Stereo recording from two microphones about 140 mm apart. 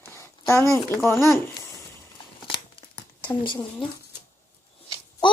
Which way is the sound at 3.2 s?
35° left (ahead or behind).